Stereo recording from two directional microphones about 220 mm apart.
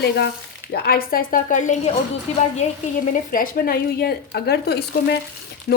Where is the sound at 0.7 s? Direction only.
45° left (ahead or behind).